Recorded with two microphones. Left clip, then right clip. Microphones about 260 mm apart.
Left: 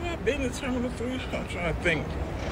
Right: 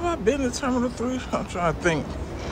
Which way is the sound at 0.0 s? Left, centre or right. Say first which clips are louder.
Right 5 dB; centre.